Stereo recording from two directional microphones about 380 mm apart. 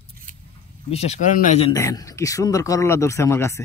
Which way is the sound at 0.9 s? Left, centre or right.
Centre.